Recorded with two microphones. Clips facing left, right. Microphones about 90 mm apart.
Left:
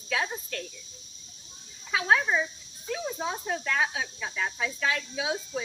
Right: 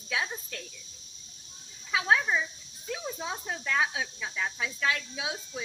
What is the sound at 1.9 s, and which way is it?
Speech, 5° right (ahead or behind).